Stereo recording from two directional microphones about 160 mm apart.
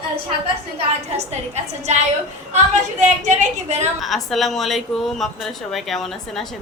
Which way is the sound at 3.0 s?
45° right (ahead or behind).